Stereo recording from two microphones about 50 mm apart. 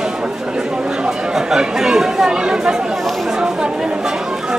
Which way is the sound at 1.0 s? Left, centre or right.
Centre.